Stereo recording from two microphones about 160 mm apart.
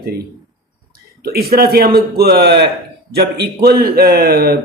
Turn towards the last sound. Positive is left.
turn(degrees=-75)  # may be behind; listen again after turning